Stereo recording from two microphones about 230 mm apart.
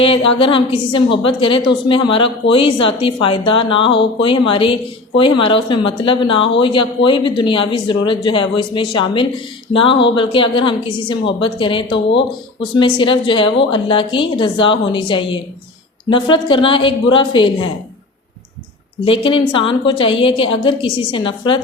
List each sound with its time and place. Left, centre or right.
0.0 s a woman's voice: left
19.2 s a woman's voice: left